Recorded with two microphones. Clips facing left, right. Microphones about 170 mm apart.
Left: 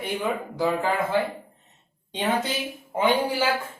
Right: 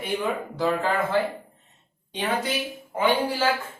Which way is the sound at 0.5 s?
15° left (ahead or behind).